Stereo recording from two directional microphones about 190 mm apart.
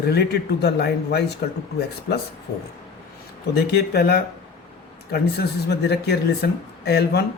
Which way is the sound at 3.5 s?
60° left (ahead or behind).